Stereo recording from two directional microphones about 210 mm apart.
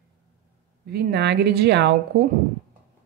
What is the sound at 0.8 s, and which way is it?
Speech, 55° right (ahead or behind).